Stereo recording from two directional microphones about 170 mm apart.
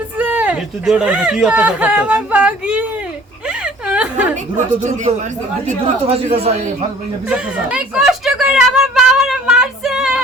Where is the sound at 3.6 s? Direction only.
5° right (ahead or behind).